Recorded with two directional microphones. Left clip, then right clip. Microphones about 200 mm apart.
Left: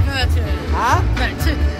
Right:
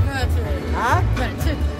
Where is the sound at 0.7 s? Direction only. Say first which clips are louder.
Left 3 dB; 10° right (ahead or behind).